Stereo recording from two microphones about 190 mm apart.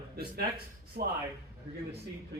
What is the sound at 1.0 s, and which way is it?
Speech, 50° right (ahead or behind).